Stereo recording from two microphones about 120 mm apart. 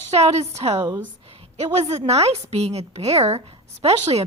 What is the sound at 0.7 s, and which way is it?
Speech, 35° right (ahead or behind).